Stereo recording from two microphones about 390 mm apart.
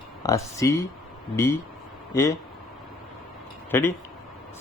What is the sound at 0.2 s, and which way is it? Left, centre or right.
Speech, centre.